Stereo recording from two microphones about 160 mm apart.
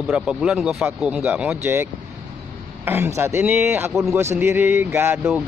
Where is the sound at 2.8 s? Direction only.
15° right (ahead or behind).